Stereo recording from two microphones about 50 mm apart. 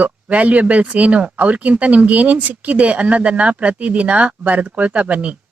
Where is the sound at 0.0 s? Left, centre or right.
Right.